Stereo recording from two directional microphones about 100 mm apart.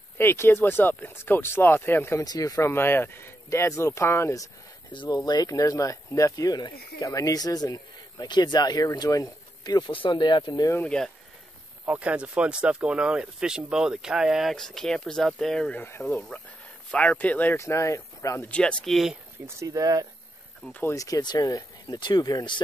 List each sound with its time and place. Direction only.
0.2 s speech: 25° left (ahead or behind)
2.2 s speech: 40° left (ahead or behind)
2.7 s speech: 25° left (ahead or behind)
4.9 s speech: 50° left (ahead or behind)
10.8 s speech: 10° left (ahead or behind)
11.8 s speech: 15° right (ahead or behind); by 15.8 s 5° left (ahead or behind)
15.8 s speech: 25° left (ahead or behind)
16.1 s speech: 5° left (ahead or behind)
17.6 s speech: 30° left (ahead or behind)
18.5 s speech: 10° left (ahead or behind)
19.4 s speech: 35° right (ahead or behind)
20.8 s speech: 35° left (ahead or behind)